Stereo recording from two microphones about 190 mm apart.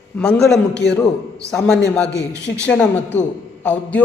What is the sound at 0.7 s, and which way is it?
Speech, 65° left (ahead or behind).